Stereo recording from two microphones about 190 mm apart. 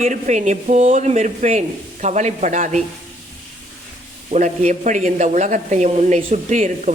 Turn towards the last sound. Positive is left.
turn(degrees=-40)  # may be behind; listen again after turning